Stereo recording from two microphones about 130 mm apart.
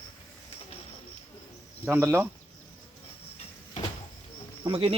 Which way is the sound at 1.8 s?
20° right (ahead or behind).